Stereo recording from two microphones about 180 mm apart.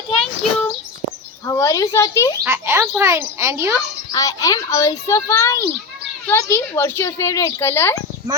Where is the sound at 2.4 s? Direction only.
15° right (ahead or behind).